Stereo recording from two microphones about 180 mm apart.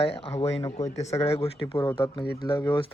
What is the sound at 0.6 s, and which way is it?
Speech, 20° left (ahead or behind).